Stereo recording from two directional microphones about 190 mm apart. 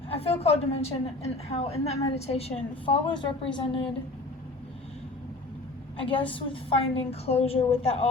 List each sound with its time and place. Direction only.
0.1 s a woman's voice: 30° left (ahead or behind)
6.0 s a woman's voice: 25° left (ahead or behind)